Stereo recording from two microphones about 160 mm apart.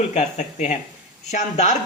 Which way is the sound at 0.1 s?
45° left (ahead or behind).